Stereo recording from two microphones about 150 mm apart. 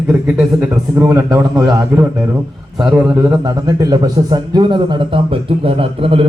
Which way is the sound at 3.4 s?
25° right (ahead or behind).